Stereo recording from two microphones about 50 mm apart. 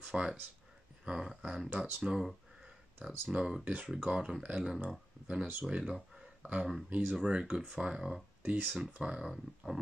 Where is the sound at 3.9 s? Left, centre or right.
Centre.